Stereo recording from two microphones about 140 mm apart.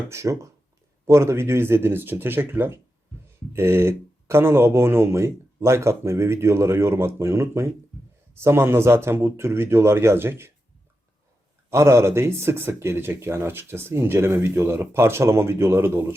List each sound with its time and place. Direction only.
0.1 s speech: 20° right (ahead or behind)
11.7 s speech: 20° right (ahead or behind)